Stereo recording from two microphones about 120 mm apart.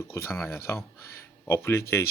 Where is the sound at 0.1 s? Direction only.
20° left (ahead or behind).